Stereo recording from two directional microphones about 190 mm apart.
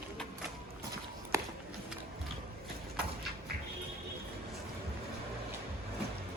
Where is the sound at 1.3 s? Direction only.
15° right (ahead or behind).